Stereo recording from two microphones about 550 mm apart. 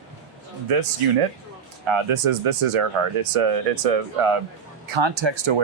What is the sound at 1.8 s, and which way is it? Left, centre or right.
Speech, right.